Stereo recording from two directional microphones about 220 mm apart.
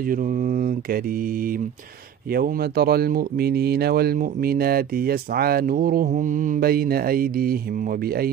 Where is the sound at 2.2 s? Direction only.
45° right (ahead or behind).